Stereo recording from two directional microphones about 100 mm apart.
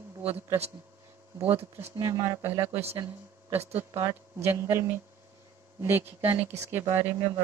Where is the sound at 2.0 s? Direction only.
35° right (ahead or behind).